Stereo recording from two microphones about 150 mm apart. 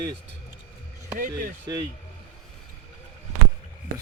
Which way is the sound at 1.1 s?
65° right (ahead or behind).